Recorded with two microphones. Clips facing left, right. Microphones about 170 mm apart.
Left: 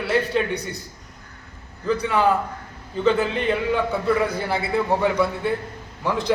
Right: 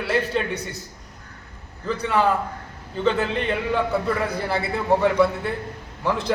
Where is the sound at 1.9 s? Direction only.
Centre (ahead or behind).